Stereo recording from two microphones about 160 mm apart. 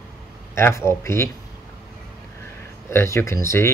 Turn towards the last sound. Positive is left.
turn(degrees=15)  # may be behind; listen again after turning